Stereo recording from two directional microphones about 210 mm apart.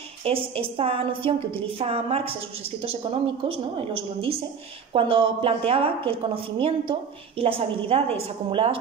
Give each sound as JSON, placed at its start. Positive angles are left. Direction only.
{"t": 0.2, "sound": "a woman's voice", "side_deg": -25}